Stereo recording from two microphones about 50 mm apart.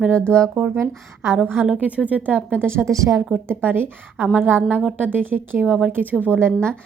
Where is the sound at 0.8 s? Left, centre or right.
Right.